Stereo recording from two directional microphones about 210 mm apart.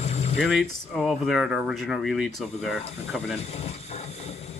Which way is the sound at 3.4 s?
30° left (ahead or behind).